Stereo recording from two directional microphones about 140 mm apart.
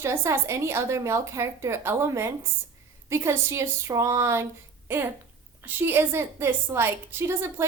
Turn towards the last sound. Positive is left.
turn(degrees=-20)  # may be behind; listen again after turning